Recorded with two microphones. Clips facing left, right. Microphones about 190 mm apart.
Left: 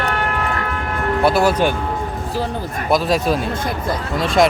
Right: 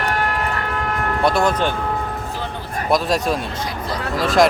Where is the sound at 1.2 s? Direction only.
5° left (ahead or behind).